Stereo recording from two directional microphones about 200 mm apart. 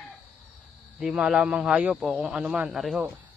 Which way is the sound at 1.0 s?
5° right (ahead or behind).